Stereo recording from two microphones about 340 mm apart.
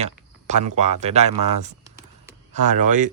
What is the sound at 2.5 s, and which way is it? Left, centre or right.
Speech, right.